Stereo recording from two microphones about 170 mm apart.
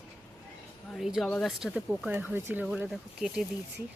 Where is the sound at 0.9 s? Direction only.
Centre (ahead or behind).